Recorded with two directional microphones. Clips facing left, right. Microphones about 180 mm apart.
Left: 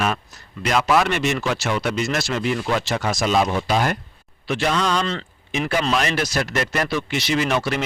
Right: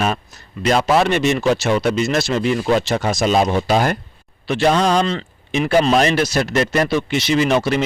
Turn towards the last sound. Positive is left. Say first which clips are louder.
# right 5 dB
turn(degrees=-25)  # may be behind; listen again after turning